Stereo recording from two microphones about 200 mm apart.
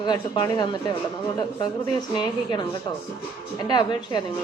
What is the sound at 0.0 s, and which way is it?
Speech, 20° left (ahead or behind).